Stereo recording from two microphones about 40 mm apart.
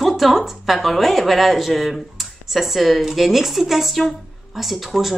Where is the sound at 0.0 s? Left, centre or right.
Centre.